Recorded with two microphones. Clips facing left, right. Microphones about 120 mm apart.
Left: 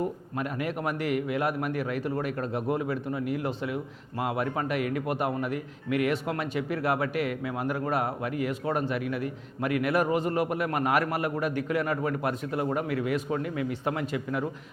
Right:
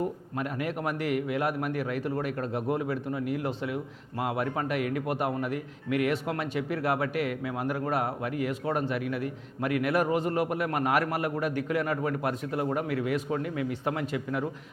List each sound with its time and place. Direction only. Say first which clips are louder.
0.0 s a man's voice: left 1 dB; 25° left (ahead or behind)